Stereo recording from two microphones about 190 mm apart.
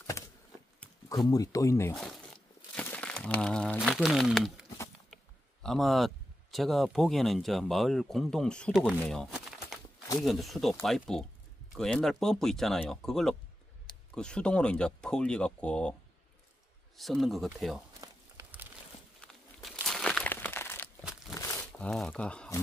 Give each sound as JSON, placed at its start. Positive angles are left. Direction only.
{"t": 0.2, "sound": "a sound", "side_deg": 15}
{"t": 1.3, "sound": "speech", "side_deg": 15}
{"t": 2.0, "sound": "crumpling", "side_deg": 5}
{"t": 5.1, "sound": "speech", "side_deg": 0}
{"t": 16.9, "sound": "speech", "side_deg": 0}
{"t": 18.0, "sound": "a sound", "side_deg": -10}
{"t": 19.2, "sound": "crumpling", "side_deg": 5}
{"t": 21.0, "sound": "crumpling", "side_deg": 0}
{"t": 21.4, "sound": "a sound", "side_deg": 15}
{"t": 21.7, "sound": "speech", "side_deg": 5}